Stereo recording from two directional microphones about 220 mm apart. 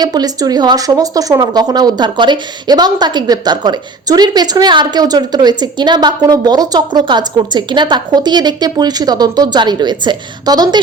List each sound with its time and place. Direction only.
0.0 s speech: 20° right (ahead or behind)